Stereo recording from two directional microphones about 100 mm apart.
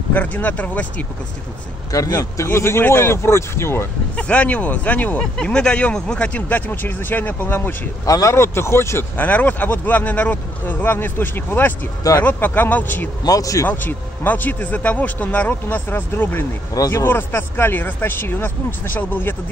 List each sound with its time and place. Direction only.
0.1 s speech: 15° left (ahead or behind)
1.9 s speech: 35° left (ahead or behind)
2.4 s speech: 25° left (ahead or behind)
4.2 s speech: 10° left (ahead or behind)
8.0 s speech: 35° left (ahead or behind)
9.1 s speech: 15° left (ahead or behind)
13.2 s speech: 35° left (ahead or behind)
13.7 s speech: 20° left (ahead or behind)
16.7 s speech: 35° left (ahead or behind)
17.0 s speech: 20° left (ahead or behind)